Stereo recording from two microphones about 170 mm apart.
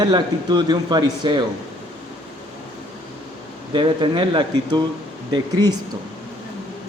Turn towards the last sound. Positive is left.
turn(degrees=-25)  # may be behind; listen again after turning